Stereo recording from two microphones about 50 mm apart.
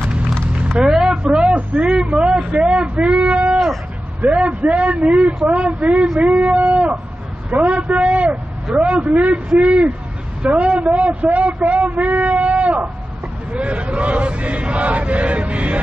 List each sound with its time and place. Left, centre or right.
0.7 s a sound: centre
4.2 s a man's voice: right
6.6 s plucked string instrument: right
7.5 s vehicle: right
8.7 s a man's voice: right
12.3 s a sound: right